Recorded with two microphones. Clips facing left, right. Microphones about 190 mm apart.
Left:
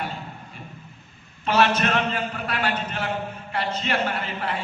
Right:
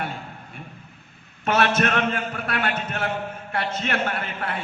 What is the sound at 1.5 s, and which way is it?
A man's voice, 50° right (ahead or behind).